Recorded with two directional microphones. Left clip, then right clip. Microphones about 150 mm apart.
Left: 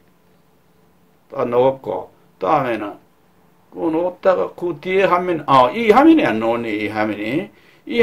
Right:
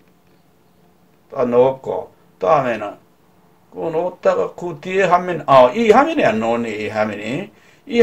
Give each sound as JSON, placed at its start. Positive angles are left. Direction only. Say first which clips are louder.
{"t": 1.3, "sound": "speech", "louder": "right 2 dB", "side_deg": 35}
{"t": 4.2, "sound": "speech", "louder": "even", "side_deg": 35}